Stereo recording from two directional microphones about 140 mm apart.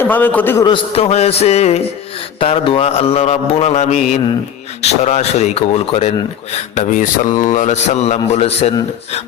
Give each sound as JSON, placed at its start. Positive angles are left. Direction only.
{"t": 0.0, "sound": "a man's voice", "side_deg": 15}
{"t": 0.6, "sound": "mantra", "side_deg": 40}
{"t": 6.7, "sound": "a sound", "side_deg": 65}
{"t": 7.3, "sound": "mantra", "side_deg": 65}